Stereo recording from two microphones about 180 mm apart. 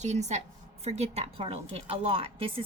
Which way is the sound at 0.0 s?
40° right (ahead or behind).